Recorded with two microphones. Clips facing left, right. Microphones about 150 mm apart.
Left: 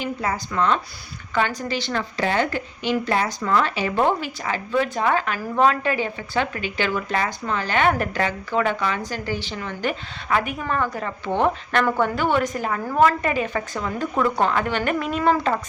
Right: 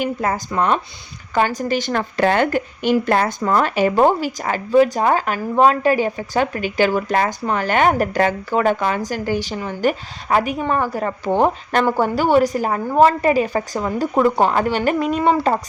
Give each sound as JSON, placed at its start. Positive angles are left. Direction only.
{"t": 0.0, "sound": "a woman's voice", "side_deg": -50}